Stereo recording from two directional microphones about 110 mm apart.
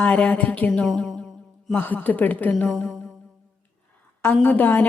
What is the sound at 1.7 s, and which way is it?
Speech, 20° left (ahead or behind).